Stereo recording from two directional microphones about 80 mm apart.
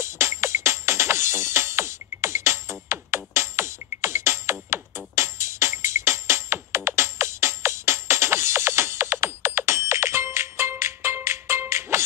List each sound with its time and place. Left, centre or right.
0.0 s music: right